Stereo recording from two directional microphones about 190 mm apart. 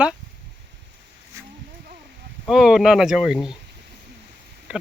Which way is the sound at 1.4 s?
15° right (ahead or behind).